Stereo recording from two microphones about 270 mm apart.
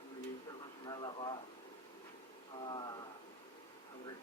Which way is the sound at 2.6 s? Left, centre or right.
Centre.